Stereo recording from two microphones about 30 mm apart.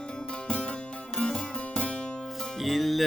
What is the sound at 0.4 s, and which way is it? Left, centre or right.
Music, left.